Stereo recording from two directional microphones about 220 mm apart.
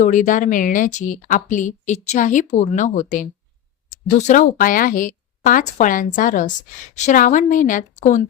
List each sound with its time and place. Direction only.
0.0 s a woman's voice: 35° left (ahead or behind)